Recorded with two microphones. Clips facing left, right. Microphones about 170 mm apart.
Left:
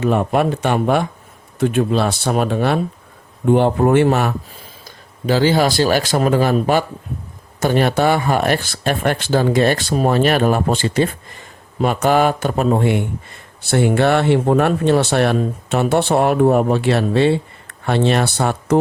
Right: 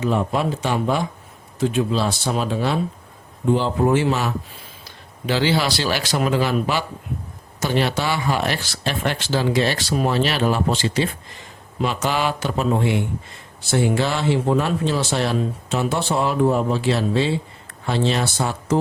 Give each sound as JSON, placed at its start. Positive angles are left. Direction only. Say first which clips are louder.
{"t": 0.0, "sound": "speech", "louder": "left 5 dB", "side_deg": 60}
{"t": 5.2, "sound": "speech", "louder": "left 5 dB", "side_deg": 45}